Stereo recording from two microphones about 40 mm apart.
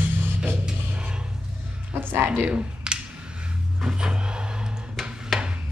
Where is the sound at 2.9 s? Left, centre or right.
Right.